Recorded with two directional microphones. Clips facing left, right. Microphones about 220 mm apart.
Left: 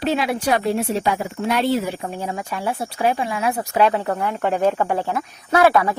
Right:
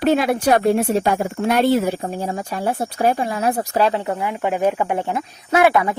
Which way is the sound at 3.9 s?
15° right (ahead or behind).